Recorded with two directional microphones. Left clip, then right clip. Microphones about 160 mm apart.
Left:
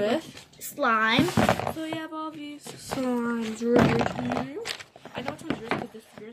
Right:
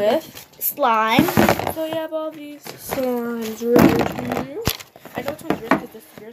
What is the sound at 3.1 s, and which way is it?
Speech, 40° left (ahead or behind).